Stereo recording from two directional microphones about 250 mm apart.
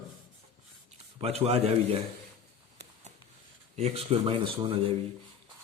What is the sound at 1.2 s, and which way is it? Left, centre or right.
Speech, right.